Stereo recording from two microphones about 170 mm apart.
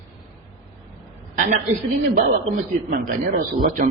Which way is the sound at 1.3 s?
50° right (ahead or behind).